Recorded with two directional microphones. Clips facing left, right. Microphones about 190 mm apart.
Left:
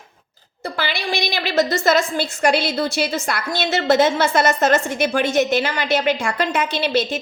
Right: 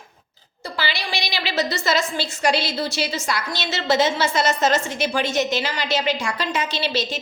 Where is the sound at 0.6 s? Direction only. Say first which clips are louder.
Left 3 dB; 50° left (ahead or behind).